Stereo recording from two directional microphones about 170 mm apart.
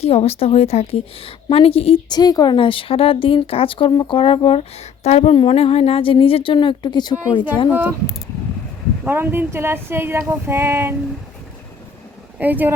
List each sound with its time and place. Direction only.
0.0 s a woman's voice: 35° left (ahead or behind)
7.7 s female singing: 10° right (ahead or behind)
9.0 s female singing: 10° right (ahead or behind)
12.4 s female singing: 10° right (ahead or behind)